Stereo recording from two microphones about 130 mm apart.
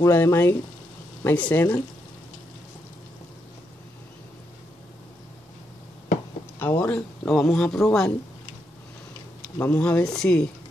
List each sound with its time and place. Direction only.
0.0 s speech: 20° left (ahead or behind)
6.6 s speech: 15° left (ahead or behind)
9.6 s speech: 15° left (ahead or behind)